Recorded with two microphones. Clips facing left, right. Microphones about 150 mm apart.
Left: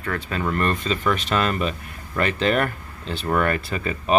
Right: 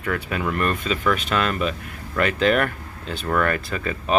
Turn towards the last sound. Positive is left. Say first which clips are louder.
# left 1 dB
turn(degrees=5)  # may be behind; listen again after turning